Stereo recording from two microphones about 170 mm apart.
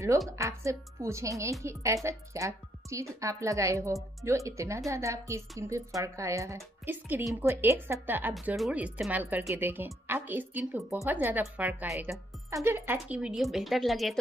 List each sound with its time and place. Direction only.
0.4 s speech: 15° right (ahead or behind); by 14.1 s centre (ahead or behind)